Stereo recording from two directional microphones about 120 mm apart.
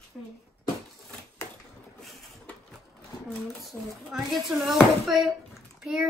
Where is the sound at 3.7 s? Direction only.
15° left (ahead or behind).